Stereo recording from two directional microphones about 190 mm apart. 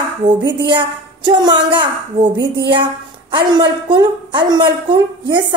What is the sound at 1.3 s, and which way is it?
Speech, 25° right (ahead or behind).